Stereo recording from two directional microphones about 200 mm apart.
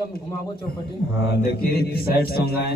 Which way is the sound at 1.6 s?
50° left (ahead or behind).